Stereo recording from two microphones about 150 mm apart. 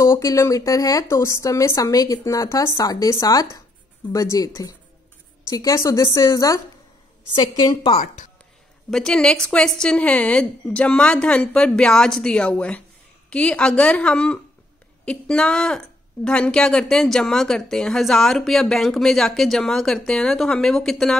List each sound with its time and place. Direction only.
0.0 s a woman's voice: 20° left (ahead or behind)
8.9 s a woman's voice: 5° left (ahead or behind)